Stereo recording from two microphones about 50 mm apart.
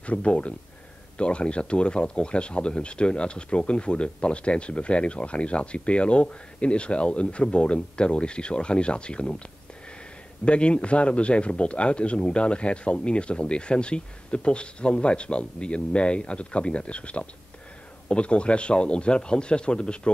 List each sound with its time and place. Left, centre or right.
0.0 s speech: left
10.4 s speech: left